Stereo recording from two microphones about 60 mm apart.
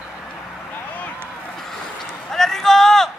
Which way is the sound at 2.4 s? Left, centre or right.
Centre.